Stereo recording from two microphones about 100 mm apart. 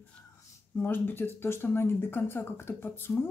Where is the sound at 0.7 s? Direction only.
20° left (ahead or behind).